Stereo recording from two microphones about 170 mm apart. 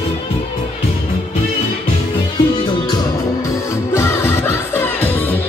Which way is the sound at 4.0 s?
15° left (ahead or behind).